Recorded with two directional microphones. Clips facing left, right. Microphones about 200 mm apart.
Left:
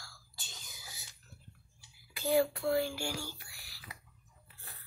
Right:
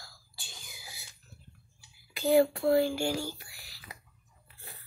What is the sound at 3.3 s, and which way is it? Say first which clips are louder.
Whispering: right 3 dB; 20° right (ahead or behind).